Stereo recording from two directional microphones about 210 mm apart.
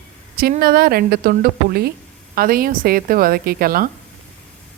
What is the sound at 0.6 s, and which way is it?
Speech, 45° right (ahead or behind).